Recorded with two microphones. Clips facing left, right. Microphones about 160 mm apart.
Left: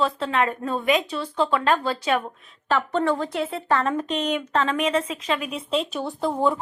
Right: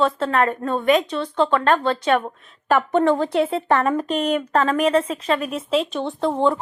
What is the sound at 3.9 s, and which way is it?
Speech, 40° right (ahead or behind).